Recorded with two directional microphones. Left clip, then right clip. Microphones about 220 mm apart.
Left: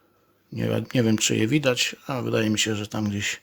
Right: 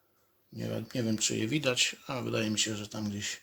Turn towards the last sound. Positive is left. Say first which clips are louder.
# left 9 dB
turn(degrees=40)  # may be behind; listen again after turning